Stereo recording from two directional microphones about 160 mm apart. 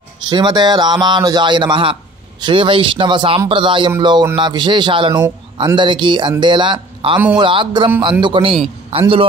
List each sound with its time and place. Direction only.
0.3 s a man's voice: 25° right (ahead or behind)